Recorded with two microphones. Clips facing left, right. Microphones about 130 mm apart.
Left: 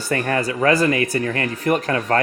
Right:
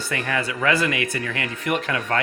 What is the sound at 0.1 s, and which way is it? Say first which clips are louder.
Speech: left 6 dB; 40° left (ahead or behind).